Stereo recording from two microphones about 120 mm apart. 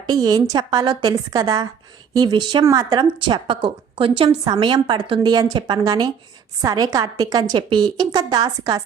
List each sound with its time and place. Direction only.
0.1 s speech: 35° right (ahead or behind)